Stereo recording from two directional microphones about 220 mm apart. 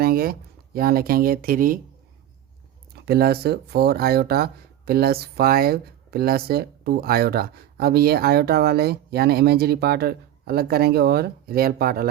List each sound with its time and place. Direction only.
0.0 s speech: 45° right (ahead or behind)
2.9 s speech: 45° right (ahead or behind)